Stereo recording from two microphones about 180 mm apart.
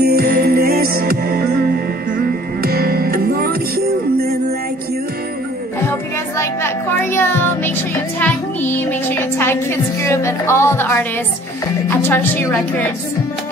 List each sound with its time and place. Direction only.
0.0 s music: 60° right (ahead or behind)
2.6 s music: 55° right (ahead or behind)
5.9 s music: 15° left (ahead or behind)
11.9 s a woman's voice: 10° left (ahead or behind)